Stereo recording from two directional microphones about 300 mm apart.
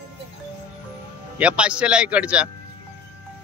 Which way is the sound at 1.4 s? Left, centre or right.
Centre.